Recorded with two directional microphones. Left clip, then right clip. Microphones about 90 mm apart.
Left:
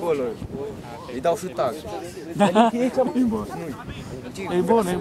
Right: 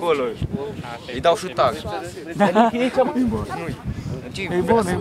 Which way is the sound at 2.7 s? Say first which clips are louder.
Right 3 dB; 70° right (ahead or behind).